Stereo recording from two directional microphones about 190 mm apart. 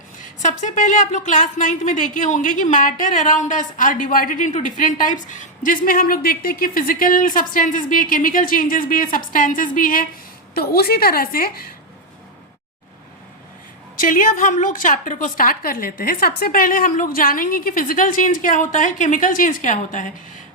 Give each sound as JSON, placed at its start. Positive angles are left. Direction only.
{"t": 0.2, "sound": "speech", "side_deg": 40}
{"t": 14.0, "sound": "speech", "side_deg": 45}